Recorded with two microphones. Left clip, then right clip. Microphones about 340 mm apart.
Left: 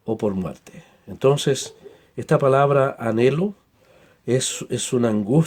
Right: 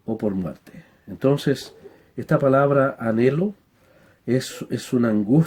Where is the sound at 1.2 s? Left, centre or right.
Left.